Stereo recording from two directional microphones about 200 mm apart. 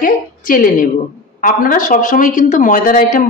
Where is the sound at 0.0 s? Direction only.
45° left (ahead or behind).